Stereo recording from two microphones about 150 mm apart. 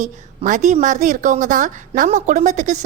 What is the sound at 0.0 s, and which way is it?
A woman's voice, 60° right (ahead or behind).